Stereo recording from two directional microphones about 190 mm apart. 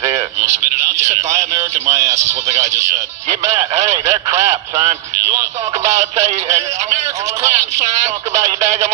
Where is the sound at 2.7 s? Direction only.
15° right (ahead or behind).